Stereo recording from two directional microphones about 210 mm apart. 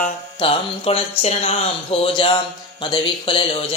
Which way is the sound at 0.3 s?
25° left (ahead or behind).